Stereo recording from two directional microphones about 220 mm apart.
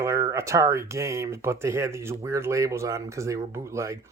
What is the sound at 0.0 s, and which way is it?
Speech, 10° right (ahead or behind).